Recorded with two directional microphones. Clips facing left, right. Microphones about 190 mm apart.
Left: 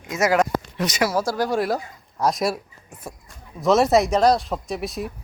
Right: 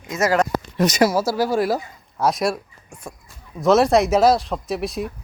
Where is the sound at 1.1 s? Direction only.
5° right (ahead or behind).